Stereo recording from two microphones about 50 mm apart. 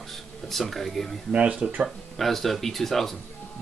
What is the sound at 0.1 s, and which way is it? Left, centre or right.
Speech, centre.